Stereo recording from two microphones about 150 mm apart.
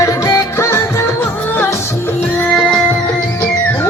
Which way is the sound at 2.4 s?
5° left (ahead or behind).